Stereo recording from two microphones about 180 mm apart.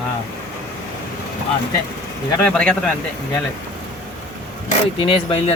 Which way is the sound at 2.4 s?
5° left (ahead or behind).